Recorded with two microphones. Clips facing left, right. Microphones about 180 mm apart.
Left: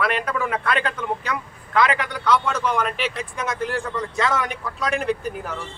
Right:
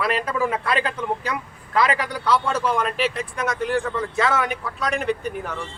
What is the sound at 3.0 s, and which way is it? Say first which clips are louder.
Speech: right 3 dB; centre (ahead or behind).